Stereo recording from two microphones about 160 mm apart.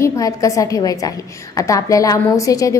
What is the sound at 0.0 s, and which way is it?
A woman's voice, 20° left (ahead or behind).